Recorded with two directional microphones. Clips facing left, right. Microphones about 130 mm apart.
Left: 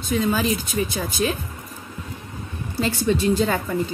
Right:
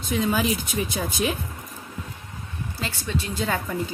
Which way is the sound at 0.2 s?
15° right (ahead or behind).